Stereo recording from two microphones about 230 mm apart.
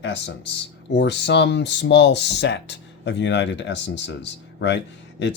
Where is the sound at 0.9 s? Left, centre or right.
Left.